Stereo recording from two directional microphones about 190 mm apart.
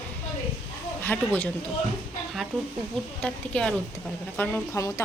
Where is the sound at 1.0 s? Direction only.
10° left (ahead or behind).